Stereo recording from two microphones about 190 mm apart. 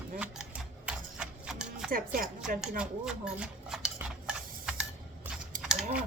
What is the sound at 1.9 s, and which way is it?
Speech, 50° right (ahead or behind).